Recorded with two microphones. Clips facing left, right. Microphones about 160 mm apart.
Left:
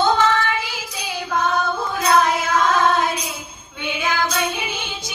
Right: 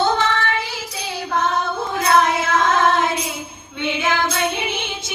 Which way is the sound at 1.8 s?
25° right (ahead or behind).